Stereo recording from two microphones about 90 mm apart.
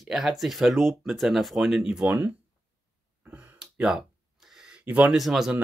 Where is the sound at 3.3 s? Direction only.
15° right (ahead or behind).